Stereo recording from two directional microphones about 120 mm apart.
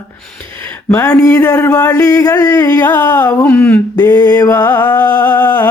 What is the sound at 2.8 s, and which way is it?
Music, 15° left (ahead or behind).